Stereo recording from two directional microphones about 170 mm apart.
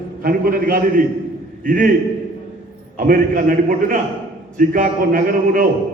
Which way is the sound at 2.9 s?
55° right (ahead or behind).